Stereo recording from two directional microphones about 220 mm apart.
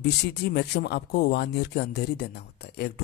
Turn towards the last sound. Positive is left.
turn(degrees=50)  # may be behind; listen again after turning